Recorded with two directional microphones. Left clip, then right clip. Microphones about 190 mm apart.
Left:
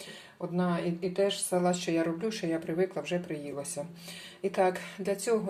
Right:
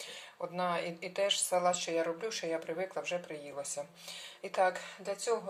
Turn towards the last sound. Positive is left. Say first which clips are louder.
# left 5 dB
turn(degrees=5)  # may be behind; listen again after turning